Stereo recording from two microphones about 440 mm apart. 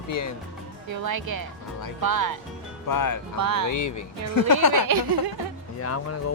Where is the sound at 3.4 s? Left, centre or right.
Right.